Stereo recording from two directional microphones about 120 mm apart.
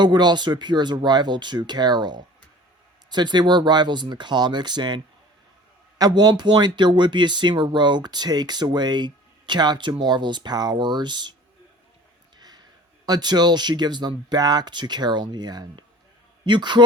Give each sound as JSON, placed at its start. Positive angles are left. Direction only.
{"t": 0.0, "sound": "speech", "side_deg": -40}
{"t": 6.0, "sound": "speech", "side_deg": -35}
{"t": 12.4, "sound": "a sound", "side_deg": -35}
{"t": 13.1, "sound": "speech", "side_deg": -35}